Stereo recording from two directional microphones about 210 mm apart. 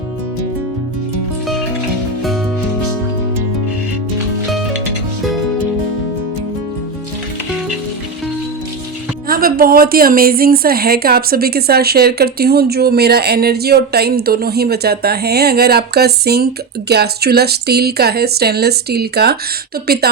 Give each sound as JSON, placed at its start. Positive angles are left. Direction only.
{"t": 9.2, "sound": "a woman's voice", "side_deg": -45}